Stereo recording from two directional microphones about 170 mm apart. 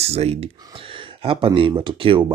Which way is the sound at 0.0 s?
40° right (ahead or behind).